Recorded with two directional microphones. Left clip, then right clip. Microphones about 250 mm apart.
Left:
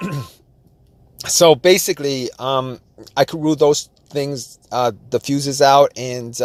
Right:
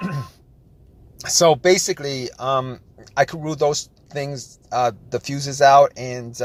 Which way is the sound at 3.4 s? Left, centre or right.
Left.